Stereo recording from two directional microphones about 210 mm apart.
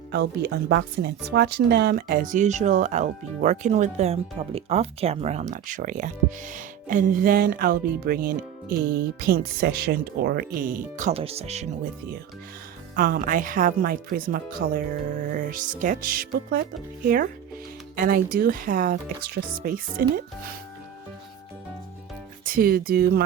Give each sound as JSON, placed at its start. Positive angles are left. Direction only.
{"t": 0.1, "sound": "speech", "side_deg": -50}
{"t": 13.0, "sound": "speech", "side_deg": -40}
{"t": 17.9, "sound": "speech", "side_deg": -45}
{"t": 22.4, "sound": "speech", "side_deg": -45}